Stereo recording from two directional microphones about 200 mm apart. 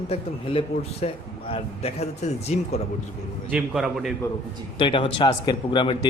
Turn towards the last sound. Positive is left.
turn(degrees=25)  # may be behind; listen again after turning